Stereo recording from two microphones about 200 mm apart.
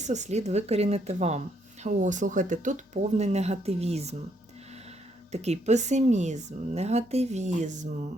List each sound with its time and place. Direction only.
0.0 s speech: 35° right (ahead or behind)
5.3 s speech: 35° right (ahead or behind)